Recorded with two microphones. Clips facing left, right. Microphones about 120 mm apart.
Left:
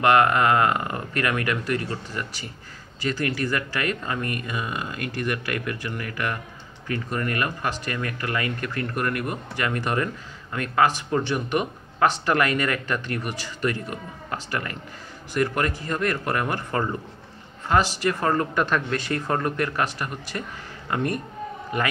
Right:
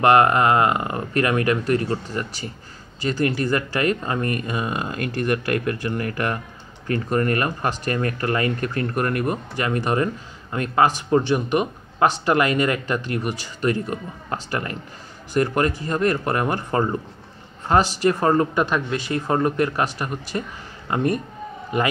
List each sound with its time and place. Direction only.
0.0 s speech: 30° right (ahead or behind)
18.0 s speech: 25° right (ahead or behind)